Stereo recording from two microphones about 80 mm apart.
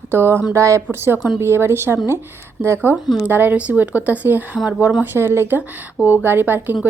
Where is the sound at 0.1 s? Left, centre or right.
Right.